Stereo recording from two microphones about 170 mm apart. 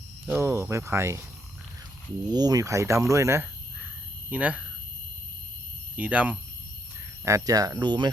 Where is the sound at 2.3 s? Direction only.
25° right (ahead or behind).